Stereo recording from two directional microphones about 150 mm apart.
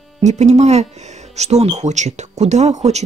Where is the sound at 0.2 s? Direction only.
50° right (ahead or behind).